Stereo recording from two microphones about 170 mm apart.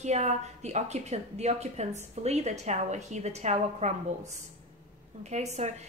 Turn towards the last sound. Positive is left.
turn(degrees=-40)  # may be behind; listen again after turning